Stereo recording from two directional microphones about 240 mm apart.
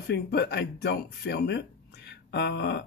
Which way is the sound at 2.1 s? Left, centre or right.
Left.